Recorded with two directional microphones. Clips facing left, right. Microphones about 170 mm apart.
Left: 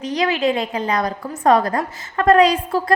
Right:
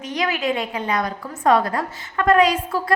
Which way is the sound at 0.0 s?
35° left (ahead or behind).